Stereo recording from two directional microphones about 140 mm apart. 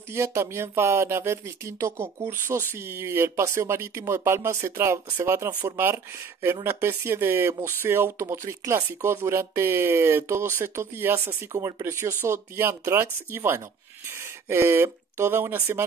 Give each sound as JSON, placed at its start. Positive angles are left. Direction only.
{"t": 0.1, "sound": "speech", "side_deg": -20}